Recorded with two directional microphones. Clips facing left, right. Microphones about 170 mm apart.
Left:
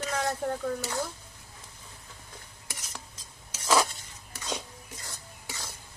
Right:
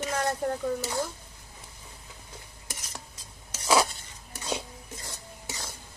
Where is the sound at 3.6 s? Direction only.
10° right (ahead or behind).